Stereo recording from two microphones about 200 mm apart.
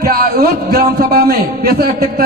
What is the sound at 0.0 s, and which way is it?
A man's voice, 50° right (ahead or behind).